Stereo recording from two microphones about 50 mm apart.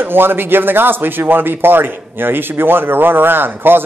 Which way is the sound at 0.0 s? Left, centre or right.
Right.